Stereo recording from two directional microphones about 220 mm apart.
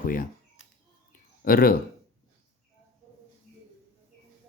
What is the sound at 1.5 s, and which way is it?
Speech, 40° left (ahead or behind).